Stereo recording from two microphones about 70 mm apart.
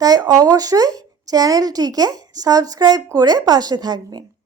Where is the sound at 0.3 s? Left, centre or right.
Right.